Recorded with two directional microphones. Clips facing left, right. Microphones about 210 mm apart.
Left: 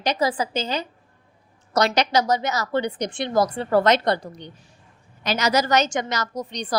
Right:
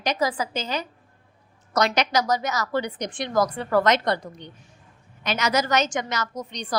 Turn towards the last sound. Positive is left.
turn(degrees=35)  # may be behind; listen again after turning